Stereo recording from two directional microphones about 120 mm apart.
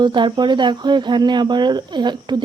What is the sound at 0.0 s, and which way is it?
Speech, 40° right (ahead or behind).